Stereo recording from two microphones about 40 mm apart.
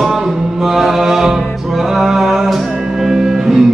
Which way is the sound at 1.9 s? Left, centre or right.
Centre.